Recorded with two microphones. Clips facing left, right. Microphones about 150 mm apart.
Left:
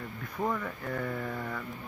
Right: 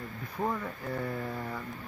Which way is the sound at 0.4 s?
15° right (ahead or behind).